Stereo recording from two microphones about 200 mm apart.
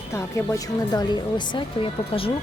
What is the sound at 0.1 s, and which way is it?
A woman's voice, 15° left (ahead or behind).